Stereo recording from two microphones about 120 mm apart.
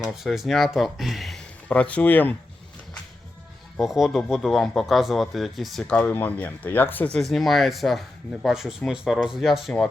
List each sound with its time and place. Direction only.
0.0 s speech: centre (ahead or behind)
1.6 s speech: 10° left (ahead or behind)
3.8 s speech: 5° right (ahead or behind); by 7.2 s 15° left (ahead or behind)
7.2 s speech: centre (ahead or behind)